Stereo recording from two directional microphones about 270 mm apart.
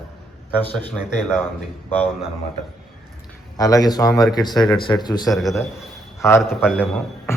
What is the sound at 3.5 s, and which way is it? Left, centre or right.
Speech, centre.